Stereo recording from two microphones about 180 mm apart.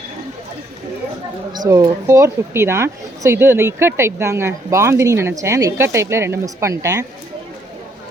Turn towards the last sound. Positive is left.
turn(degrees=-20)  # may be behind; listen again after turning